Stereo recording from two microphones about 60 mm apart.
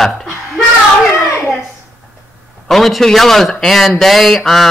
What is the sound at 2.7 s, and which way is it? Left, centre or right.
A man's voice, centre.